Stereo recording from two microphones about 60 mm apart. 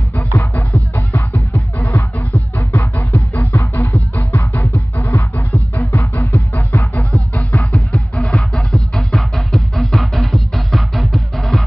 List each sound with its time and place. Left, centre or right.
0.1 s music: left
1.9 s music: left
2.7 s music: left
4.3 s music: left
7.5 s music: left
8.2 s music: centre